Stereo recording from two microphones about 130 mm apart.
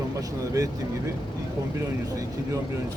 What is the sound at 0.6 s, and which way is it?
Speech, 25° right (ahead or behind).